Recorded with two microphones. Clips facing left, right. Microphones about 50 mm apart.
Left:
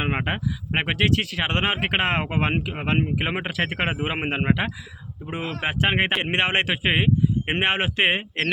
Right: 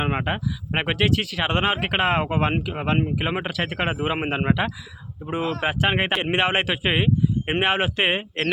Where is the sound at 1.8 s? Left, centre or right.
Centre.